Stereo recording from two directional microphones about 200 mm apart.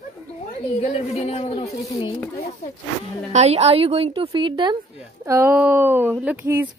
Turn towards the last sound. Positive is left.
turn(degrees=-10)  # may be behind; listen again after turning